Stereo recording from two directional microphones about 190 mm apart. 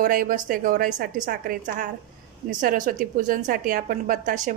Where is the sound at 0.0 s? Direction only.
45° right (ahead or behind).